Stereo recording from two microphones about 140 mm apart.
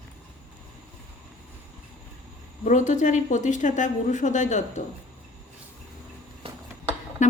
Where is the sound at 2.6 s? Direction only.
60° left (ahead or behind).